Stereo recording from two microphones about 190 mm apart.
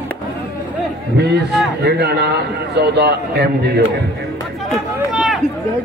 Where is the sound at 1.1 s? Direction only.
60° right (ahead or behind).